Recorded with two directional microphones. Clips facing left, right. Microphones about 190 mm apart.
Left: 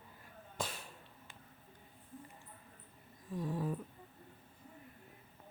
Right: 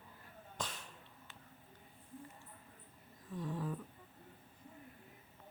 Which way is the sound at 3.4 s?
10° left (ahead or behind).